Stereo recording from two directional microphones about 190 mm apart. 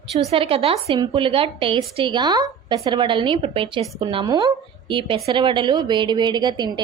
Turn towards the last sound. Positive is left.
turn(degrees=-25)  # may be behind; listen again after turning